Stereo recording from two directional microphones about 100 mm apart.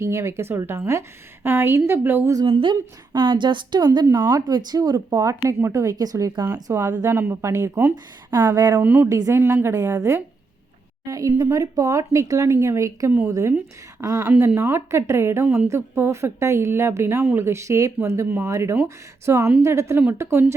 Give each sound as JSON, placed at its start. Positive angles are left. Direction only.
{"t": 0.0, "sound": "speech", "side_deg": -25}
{"t": 2.5, "sound": "a woman's voice", "side_deg": -60}
{"t": 7.1, "sound": "speech", "side_deg": -25}
{"t": 8.7, "sound": "speech", "side_deg": -20}
{"t": 9.0, "sound": "speech", "side_deg": -35}